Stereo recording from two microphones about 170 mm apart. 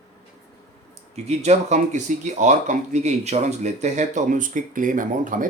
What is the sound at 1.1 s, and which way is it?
Speech, 40° right (ahead or behind).